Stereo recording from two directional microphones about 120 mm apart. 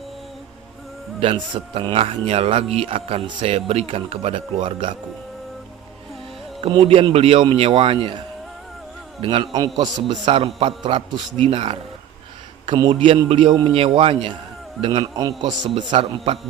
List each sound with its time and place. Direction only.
1.2 s speech: 50° right (ahead or behind)
6.6 s speech: 50° right (ahead or behind)
9.2 s speech: 45° right (ahead or behind)
9.5 s a man's voice: 30° right (ahead or behind)
15.9 s speech: 50° right (ahead or behind)